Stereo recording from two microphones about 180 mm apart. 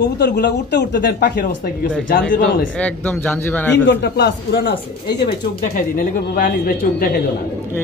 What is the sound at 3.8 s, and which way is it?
Speech, 75° left (ahead or behind).